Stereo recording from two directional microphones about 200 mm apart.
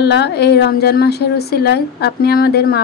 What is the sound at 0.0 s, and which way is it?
Speech, 55° left (ahead or behind).